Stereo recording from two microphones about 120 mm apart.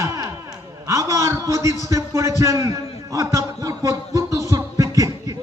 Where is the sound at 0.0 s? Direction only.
25° right (ahead or behind).